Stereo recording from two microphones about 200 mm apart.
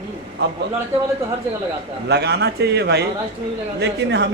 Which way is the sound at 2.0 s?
55° right (ahead or behind).